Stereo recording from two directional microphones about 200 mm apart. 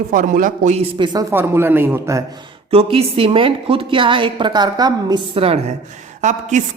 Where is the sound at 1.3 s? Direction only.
10° right (ahead or behind).